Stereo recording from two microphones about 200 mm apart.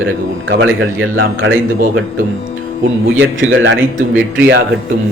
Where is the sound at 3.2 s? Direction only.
70° right (ahead or behind).